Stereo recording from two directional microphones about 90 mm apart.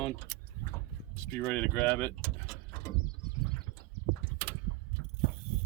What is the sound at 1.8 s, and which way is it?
Speech, 20° left (ahead or behind).